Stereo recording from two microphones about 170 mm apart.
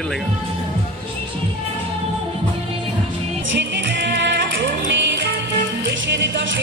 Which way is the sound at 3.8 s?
90° right.